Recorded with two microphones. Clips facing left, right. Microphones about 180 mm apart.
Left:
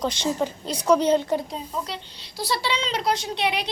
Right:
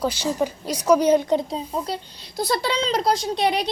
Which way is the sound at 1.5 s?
40° right (ahead or behind).